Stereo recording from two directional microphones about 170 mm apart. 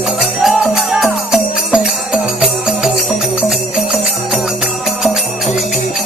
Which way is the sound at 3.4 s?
5° right (ahead or behind).